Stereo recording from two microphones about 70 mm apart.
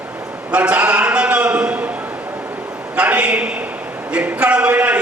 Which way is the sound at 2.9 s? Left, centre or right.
Centre.